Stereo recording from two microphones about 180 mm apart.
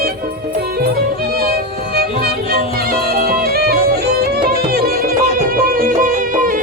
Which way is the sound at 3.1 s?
55° right (ahead or behind).